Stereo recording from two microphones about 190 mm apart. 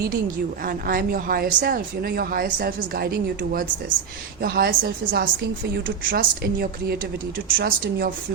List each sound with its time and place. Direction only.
0.6 s a woman's voice: 50° right (ahead or behind)